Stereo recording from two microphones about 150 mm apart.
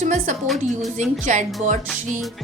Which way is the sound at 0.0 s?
60° right (ahead or behind).